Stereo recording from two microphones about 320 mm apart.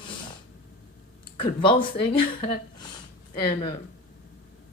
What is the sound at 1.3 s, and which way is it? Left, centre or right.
Speech, centre.